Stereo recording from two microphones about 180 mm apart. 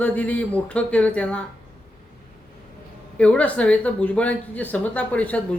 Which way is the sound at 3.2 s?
5° left (ahead or behind).